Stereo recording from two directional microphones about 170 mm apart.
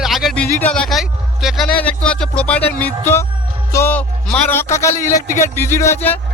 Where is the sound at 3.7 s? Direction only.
10° left (ahead or behind).